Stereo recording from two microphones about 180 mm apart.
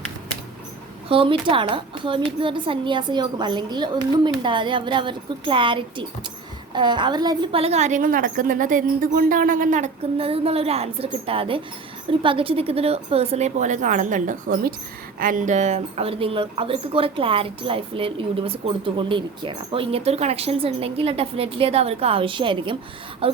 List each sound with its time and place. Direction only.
1.0 s a child's voice: 30° right (ahead or behind)